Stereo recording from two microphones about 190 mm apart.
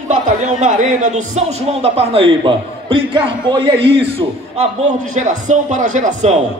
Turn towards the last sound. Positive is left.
turn(degrees=-40)  # may be behind; listen again after turning